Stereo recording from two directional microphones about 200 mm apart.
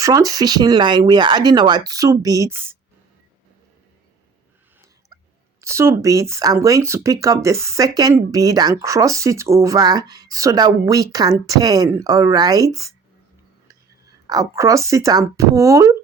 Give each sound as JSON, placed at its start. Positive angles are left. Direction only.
{"t": 0.0, "sound": "speech", "side_deg": -15}
{"t": 5.5, "sound": "speech", "side_deg": -15}
{"t": 14.3, "sound": "speech", "side_deg": -15}